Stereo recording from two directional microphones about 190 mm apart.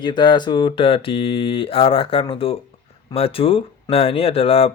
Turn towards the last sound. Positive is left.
turn(degrees=30)  # may be behind; listen again after turning